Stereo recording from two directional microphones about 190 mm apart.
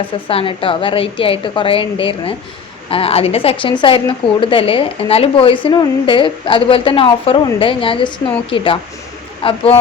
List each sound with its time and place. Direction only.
0.3 s a woman's voice: 30° left (ahead or behind)